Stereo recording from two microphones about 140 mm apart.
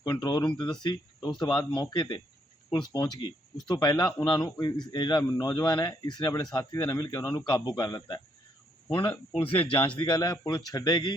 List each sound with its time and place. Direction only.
0.0 s speech: 30° left (ahead or behind)